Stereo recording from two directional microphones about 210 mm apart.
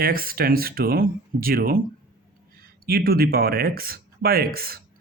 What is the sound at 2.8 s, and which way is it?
Speech, 45° right (ahead or behind).